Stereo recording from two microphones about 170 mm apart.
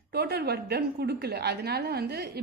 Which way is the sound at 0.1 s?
75° right (ahead or behind).